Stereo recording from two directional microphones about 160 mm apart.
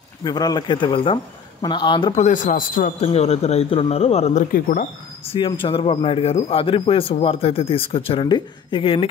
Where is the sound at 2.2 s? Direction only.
55° left (ahead or behind).